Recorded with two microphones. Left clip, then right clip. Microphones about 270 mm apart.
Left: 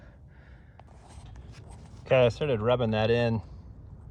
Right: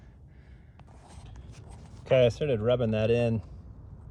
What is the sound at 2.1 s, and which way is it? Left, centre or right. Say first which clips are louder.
Speech: even; centre.